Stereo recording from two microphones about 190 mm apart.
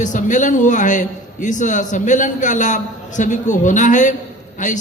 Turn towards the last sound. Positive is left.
turn(degrees=40)  # may be behind; listen again after turning